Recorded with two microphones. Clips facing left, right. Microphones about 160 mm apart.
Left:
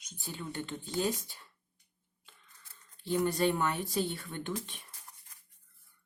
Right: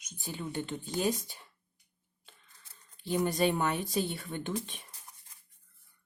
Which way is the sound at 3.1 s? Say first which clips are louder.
Even; 15° right (ahead or behind).